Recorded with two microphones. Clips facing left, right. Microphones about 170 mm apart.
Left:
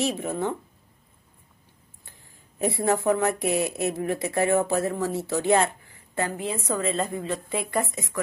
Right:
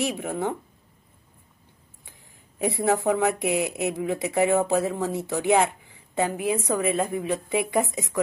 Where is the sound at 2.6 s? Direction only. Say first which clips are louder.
Even; 15° right (ahead or behind).